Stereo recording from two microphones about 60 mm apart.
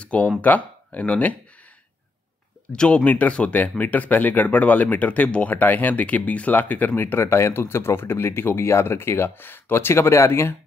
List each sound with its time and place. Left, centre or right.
0.0 s speech: left
2.7 s speech: centre
3.0 s speech: left